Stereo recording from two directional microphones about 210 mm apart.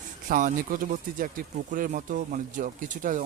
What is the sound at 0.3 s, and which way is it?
Speech, 40° right (ahead or behind).